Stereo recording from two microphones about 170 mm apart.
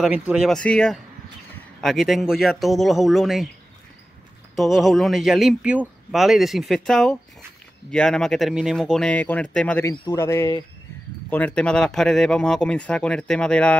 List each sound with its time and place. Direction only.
0.0 s speech: 5° right (ahead or behind)
4.6 s speech: centre (ahead or behind)